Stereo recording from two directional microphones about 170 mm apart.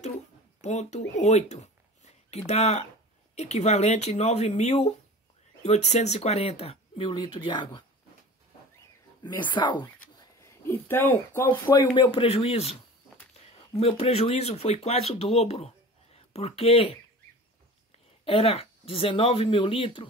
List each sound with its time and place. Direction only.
0.6 s speech: 40° left (ahead or behind)
9.2 s speech: 25° left (ahead or behind)
10.4 s speech: 15° left (ahead or behind); by 17.0 s 35° left (ahead or behind)
18.2 s speech: 35° left (ahead or behind)